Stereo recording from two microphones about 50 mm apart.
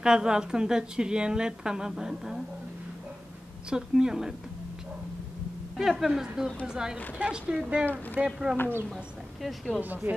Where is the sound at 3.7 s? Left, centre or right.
Centre.